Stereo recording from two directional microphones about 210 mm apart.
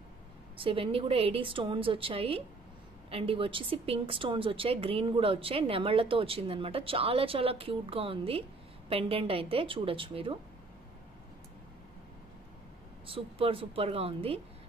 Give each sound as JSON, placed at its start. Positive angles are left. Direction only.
{"t": 0.6, "sound": "a woman's voice", "side_deg": -25}
{"t": 13.0, "sound": "a woman's voice", "side_deg": -25}